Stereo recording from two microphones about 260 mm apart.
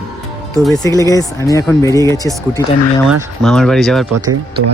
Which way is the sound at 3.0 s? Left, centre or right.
Centre.